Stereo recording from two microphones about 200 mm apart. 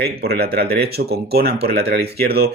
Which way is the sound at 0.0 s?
50° right (ahead or behind).